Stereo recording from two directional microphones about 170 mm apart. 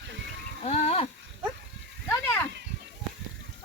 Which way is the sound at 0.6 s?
35° left (ahead or behind).